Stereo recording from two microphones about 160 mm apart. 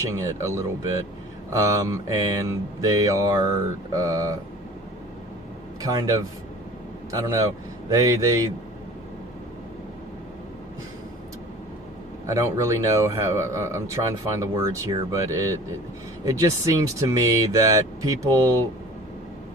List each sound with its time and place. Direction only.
0.0 s speech: 20° right (ahead or behind)
5.8 s speech: 25° right (ahead or behind)
12.2 s speech: 20° right (ahead or behind)